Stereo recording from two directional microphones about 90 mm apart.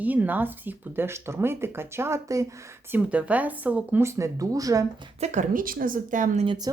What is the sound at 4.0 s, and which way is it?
Speech, 30° right (ahead or behind).